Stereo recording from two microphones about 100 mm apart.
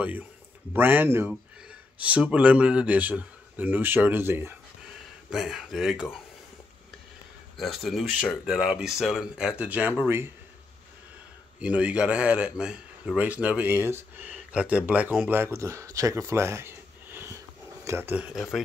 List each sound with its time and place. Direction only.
0.7 s speech: 20° right (ahead or behind)
5.3 s speech: 5° right (ahead or behind)
7.5 s speech: centre (ahead or behind); by 10.3 s 20° right (ahead or behind)
11.6 s speech: 10° right (ahead or behind)
18.3 s speech: centre (ahead or behind)